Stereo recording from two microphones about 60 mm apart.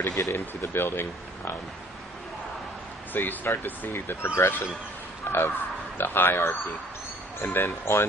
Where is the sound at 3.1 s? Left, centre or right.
Left.